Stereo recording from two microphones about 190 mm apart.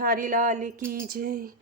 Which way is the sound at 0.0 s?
45° right (ahead or behind).